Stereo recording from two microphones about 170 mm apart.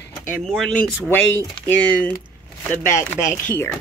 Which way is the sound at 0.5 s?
Centre (ahead or behind).